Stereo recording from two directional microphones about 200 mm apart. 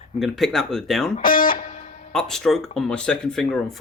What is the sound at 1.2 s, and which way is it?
Speech, 45° left (ahead or behind).